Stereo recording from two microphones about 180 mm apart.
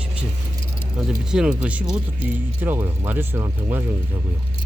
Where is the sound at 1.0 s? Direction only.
5° right (ahead or behind).